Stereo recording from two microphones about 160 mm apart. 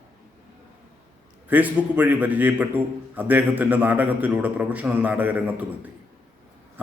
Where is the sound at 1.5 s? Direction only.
10° right (ahead or behind).